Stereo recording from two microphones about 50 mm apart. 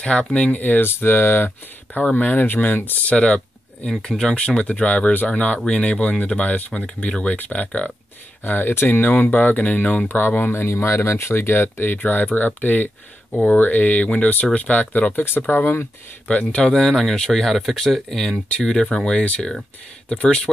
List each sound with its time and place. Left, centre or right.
0.0 s speech: left
0.6 s speech: left
0.8 s speech: left
2.1 s speech: left
3.1 s speech: left
8.5 s speech: left
9.1 s speech: left
10.0 s speech: left
10.5 s speech: left
16.3 s speech: left
16.7 s speech: centre